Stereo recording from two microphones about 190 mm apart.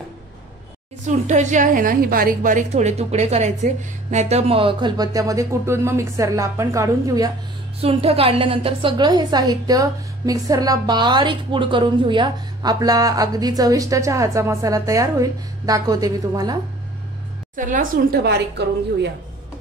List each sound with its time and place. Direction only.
1.0 s a woman's voice: 40° right (ahead or behind); by 7.2 s 15° right (ahead or behind)
7.8 s a woman's voice: 30° right (ahead or behind)
17.6 s a woman's voice: 45° right (ahead or behind)
18.6 s speech: 65° right (ahead or behind)